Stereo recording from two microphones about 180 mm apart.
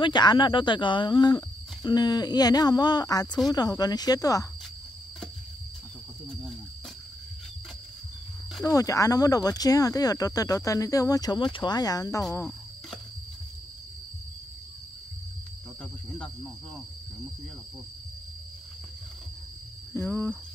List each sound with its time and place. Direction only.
0.0 s speech: 25° left (ahead or behind)
8.6 s speech: 20° left (ahead or behind)
12.4 s a sound: 5° left (ahead or behind)
19.9 s speech: 15° left (ahead or behind)